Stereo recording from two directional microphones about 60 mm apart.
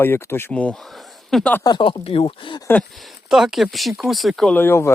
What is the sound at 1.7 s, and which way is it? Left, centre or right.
Speech, left.